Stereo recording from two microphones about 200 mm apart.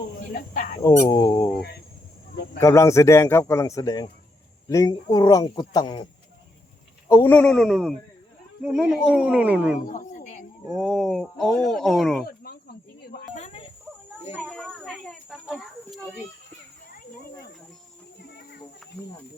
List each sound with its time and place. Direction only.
0.5 s speech: 40° left (ahead or behind)
0.8 s a man's voice: 20° left (ahead or behind)
2.6 s a man's voice: 15° left (ahead or behind)
7.1 s speech: 10° left (ahead or behind); by 9.8 s 5° right (ahead or behind)
9.8 s a sound: 40° left (ahead or behind)
10.8 s speech: centre (ahead or behind)
12.4 s cricket: 50° left (ahead or behind)
13.3 s cricket: 30° left (ahead or behind)
14.4 s a sound: centre (ahead or behind)